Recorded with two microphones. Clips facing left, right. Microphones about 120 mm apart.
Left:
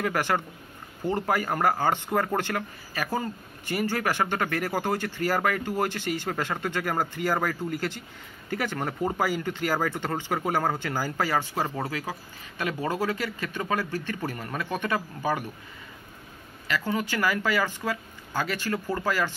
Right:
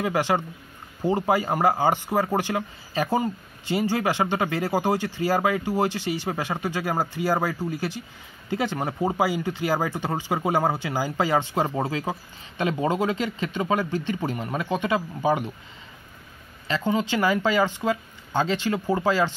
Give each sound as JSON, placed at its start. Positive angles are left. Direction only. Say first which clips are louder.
{"t": 0.0, "sound": "speech", "louder": "right 3 dB", "side_deg": -15}
{"t": 16.6, "sound": "speech", "louder": "right 4 dB", "side_deg": -25}